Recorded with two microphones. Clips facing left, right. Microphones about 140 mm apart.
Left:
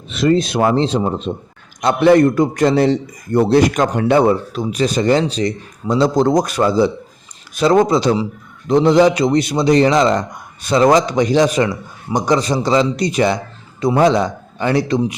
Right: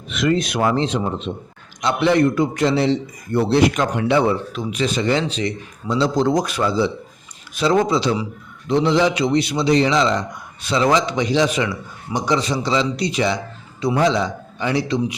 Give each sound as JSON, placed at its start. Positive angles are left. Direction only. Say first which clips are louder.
{"t": 0.1, "sound": "a man's voice", "louder": "left 4 dB", "side_deg": 30}